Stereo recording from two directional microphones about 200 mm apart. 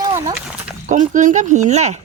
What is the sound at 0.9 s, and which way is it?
Speech, 40° right (ahead or behind).